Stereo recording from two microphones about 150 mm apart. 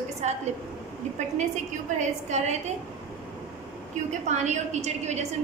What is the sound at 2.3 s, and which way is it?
Speech, 50° right (ahead or behind).